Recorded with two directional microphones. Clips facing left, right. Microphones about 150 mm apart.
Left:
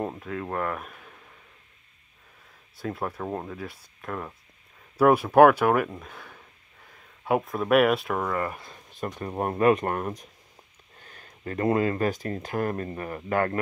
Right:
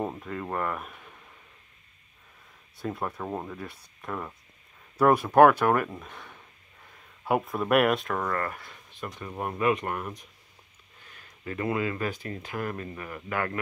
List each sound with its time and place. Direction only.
0.0 s speech: centre (ahead or behind)
2.8 s speech: centre (ahead or behind); by 8.7 s 20° left (ahead or behind)
9.0 s speech: 40° left (ahead or behind)